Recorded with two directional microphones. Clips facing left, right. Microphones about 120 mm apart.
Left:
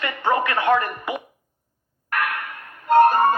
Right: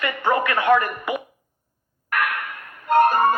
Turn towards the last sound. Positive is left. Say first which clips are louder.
# left 2 dB
turn(degrees=30)  # may be behind; listen again after turning